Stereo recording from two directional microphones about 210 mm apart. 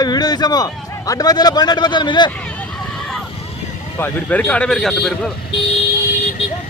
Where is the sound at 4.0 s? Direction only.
10° left (ahead or behind).